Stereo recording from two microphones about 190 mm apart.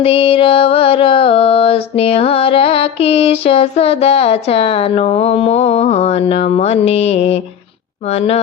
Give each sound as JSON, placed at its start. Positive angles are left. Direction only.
{"t": 0.0, "sound": "music", "side_deg": 30}